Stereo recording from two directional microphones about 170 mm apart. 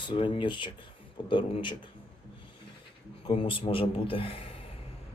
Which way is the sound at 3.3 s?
30° left (ahead or behind).